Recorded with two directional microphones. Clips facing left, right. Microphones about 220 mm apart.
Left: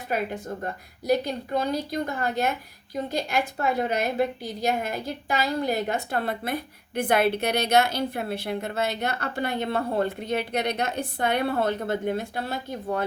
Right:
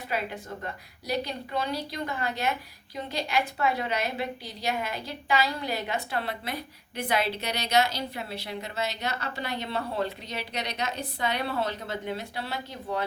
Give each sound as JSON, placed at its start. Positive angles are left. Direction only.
{"t": 0.1, "sound": "a woman's voice", "side_deg": 45}